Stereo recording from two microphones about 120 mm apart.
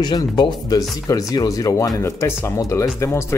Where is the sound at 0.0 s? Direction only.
35° left (ahead or behind).